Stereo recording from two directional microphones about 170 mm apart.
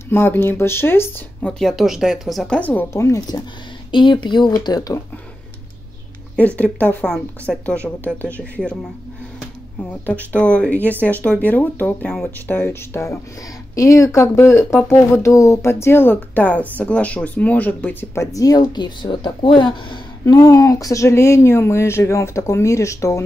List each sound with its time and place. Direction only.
0.1 s speech: 15° left (ahead or behind)
6.3 s speech: 10° left (ahead or behind)
10.3 s speech: 5° left (ahead or behind)